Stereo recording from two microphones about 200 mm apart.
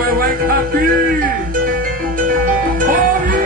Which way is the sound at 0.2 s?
45° right (ahead or behind).